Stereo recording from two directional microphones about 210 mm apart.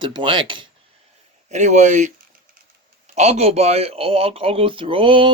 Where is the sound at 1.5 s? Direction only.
35° right (ahead or behind).